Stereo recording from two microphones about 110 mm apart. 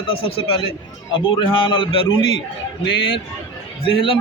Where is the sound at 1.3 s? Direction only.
50° left (ahead or behind).